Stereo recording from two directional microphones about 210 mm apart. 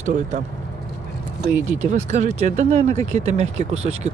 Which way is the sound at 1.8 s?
35° right (ahead or behind).